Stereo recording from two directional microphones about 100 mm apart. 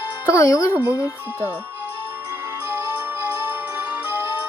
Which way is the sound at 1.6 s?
20° right (ahead or behind).